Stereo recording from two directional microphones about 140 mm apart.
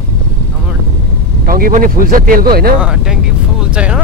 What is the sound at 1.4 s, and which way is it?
Speech, 90° right.